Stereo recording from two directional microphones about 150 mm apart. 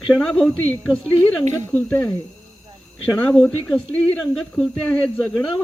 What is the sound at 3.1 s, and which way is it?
Speech, 5° left (ahead or behind).